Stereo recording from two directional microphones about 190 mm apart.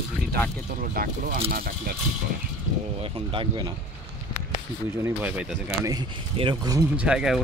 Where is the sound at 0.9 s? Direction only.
45° right (ahead or behind).